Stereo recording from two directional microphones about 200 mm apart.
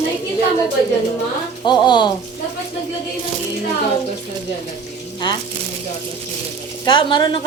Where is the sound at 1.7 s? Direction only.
20° left (ahead or behind).